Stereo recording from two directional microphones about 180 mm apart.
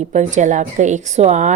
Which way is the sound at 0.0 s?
40° right (ahead or behind).